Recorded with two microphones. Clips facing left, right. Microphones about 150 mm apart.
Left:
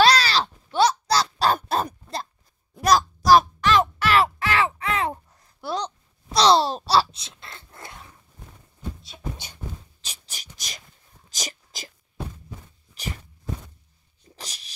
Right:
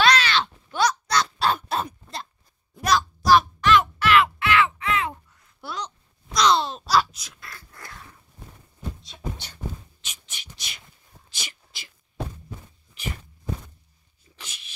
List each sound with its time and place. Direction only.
0.0 s a sound: 35° left (ahead or behind)
9.0 s beatboxing: 5° left (ahead or behind)
10.0 s a sound: 35° left (ahead or behind)
11.2 s whispering: 40° left (ahead or behind)
13.0 s walk: 35° left (ahead or behind)
14.3 s dog: 35° left (ahead or behind)